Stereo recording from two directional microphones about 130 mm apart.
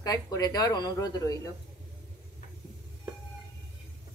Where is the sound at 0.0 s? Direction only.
30° left (ahead or behind).